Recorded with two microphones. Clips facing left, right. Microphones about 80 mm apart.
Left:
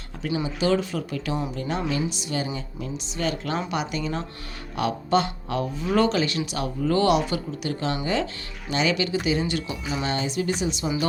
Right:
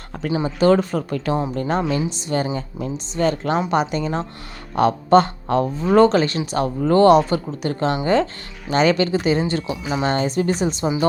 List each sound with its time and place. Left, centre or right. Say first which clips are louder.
0.4 s speech: right 8 dB; right